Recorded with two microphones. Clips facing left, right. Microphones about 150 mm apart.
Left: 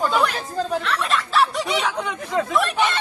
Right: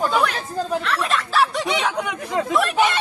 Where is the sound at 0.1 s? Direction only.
Centre (ahead or behind).